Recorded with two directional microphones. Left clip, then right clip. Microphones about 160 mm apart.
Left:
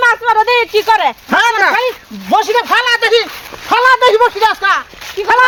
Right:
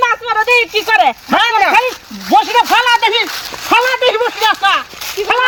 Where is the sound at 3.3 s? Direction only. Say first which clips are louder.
Right 4 dB; 90° right.